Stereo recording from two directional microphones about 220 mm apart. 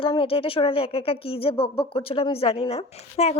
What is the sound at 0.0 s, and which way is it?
A woman's voice, 25° left (ahead or behind).